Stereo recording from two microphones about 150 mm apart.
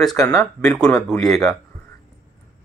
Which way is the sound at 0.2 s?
20° left (ahead or behind).